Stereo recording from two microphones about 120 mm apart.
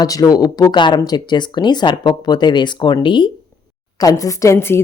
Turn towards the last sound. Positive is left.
turn(degrees=20)  # may be behind; listen again after turning